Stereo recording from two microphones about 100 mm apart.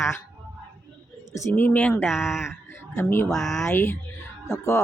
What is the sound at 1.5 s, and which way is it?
Speech, 15° left (ahead or behind).